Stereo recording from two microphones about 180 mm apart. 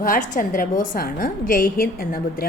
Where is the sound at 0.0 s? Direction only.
50° left (ahead or behind).